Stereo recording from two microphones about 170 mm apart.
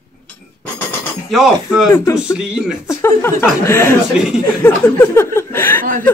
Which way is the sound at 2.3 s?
5° right (ahead or behind).